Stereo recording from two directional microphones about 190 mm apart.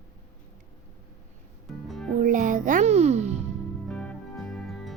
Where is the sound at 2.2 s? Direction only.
45° right (ahead or behind).